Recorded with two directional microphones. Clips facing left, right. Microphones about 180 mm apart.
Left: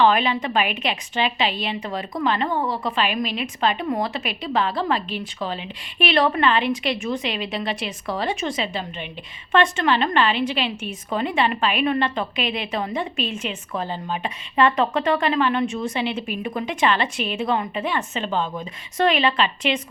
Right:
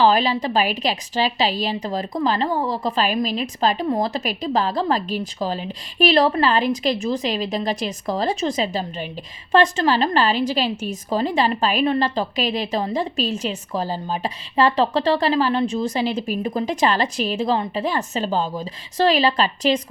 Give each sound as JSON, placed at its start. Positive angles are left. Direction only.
{"t": 0.0, "sound": "a woman's voice", "side_deg": -35}